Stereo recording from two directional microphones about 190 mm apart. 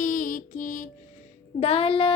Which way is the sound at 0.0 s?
45° left (ahead or behind).